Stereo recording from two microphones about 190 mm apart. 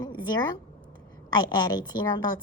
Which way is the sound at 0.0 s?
20° left (ahead or behind).